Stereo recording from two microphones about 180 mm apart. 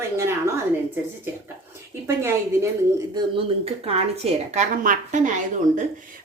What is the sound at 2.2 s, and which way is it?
Speech, 15° right (ahead or behind).